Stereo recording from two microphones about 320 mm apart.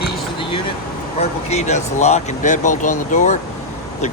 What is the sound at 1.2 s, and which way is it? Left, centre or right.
Speech, left.